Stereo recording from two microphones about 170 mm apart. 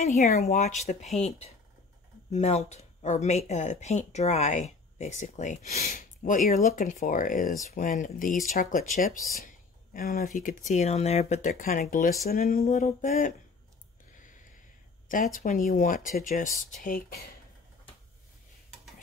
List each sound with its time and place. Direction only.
0.0 s speech: 40° left (ahead or behind)
12.3 s speech: 60° left (ahead or behind)
12.6 s speech: 45° left (ahead or behind)
14.1 s snort: 50° left (ahead or behind)
15.3 s speech: 55° left (ahead or behind)
16.8 s speech: 60° left (ahead or behind)